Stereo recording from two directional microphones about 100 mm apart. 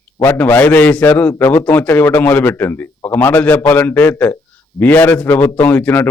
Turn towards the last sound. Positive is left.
turn(degrees=20)  # may be behind; listen again after turning